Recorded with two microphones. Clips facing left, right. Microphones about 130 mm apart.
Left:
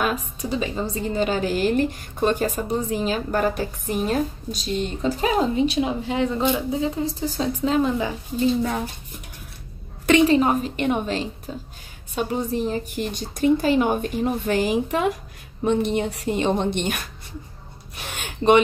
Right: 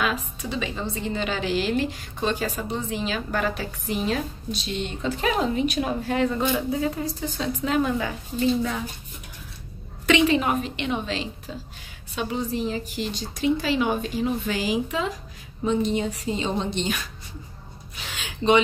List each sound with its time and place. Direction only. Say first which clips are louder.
0.0 s a woman's voice: left 2 dB; 40° left (ahead or behind)
5.8 s a woman's voice: left 1 dB; 20° left (ahead or behind)
10.0 s a woman's voice: left 4 dB; 45° left (ahead or behind)
10.8 s a woman's voice: left 5 dB; 45° left (ahead or behind)
17.9 s gasp: left 4 dB; 55° left (ahead or behind)